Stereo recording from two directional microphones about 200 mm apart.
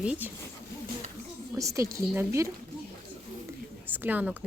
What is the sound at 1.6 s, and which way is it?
Speech, 15° right (ahead or behind).